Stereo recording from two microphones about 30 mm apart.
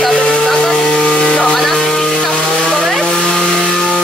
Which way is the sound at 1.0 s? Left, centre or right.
Left.